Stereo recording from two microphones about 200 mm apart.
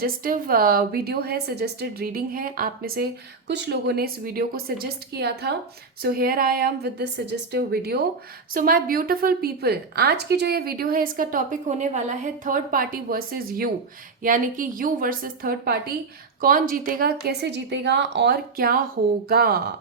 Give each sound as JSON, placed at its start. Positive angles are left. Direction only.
{"t": 0.0, "sound": "a woman's voice", "side_deg": -45}